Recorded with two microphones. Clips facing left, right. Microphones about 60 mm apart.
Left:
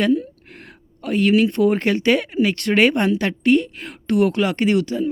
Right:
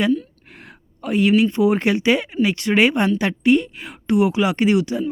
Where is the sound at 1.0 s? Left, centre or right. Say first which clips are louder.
Right 1 dB; centre.